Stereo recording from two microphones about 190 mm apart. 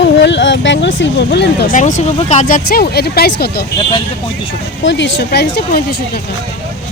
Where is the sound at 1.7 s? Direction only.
40° left (ahead or behind).